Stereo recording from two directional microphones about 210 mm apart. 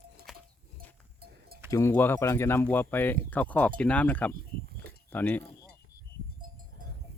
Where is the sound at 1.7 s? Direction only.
10° left (ahead or behind).